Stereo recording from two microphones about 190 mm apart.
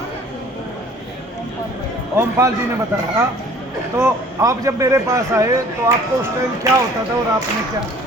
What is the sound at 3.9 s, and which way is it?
A man's voice, 15° right (ahead or behind).